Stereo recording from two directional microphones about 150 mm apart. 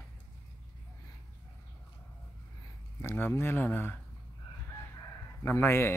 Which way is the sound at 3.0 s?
15° left (ahead or behind).